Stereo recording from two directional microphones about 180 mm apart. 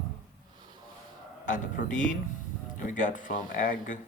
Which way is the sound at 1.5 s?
45° left (ahead or behind).